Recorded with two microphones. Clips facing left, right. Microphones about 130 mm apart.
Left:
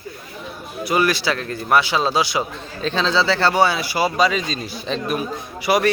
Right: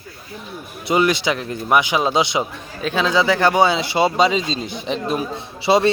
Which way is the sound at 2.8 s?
10° right (ahead or behind).